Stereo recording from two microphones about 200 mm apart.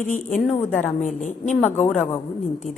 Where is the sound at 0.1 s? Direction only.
40° left (ahead or behind).